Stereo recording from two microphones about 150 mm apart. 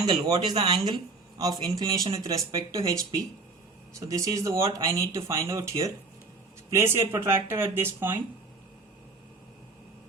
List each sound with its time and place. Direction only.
0.0 s speech: 30° right (ahead or behind)